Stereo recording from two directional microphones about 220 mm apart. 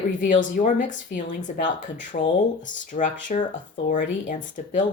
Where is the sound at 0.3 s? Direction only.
35° left (ahead or behind).